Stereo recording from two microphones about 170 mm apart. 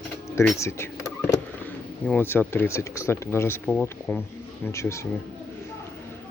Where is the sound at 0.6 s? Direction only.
15° left (ahead or behind).